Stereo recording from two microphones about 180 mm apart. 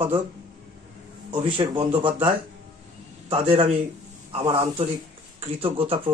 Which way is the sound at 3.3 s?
30° right (ahead or behind).